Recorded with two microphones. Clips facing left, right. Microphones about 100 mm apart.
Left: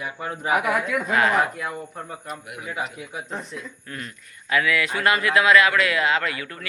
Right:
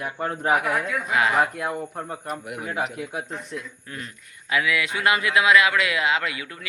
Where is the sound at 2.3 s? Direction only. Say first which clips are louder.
Right 2 dB; 55° right (ahead or behind).